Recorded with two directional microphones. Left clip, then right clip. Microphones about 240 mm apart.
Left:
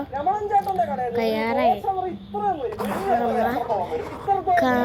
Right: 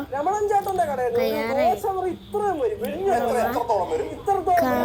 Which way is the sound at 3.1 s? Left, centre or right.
Right.